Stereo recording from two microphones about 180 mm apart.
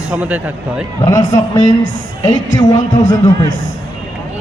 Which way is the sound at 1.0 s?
20° left (ahead or behind).